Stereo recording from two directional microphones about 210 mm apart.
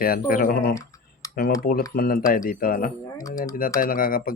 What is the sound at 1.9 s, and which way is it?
Speech, 45° left (ahead or behind).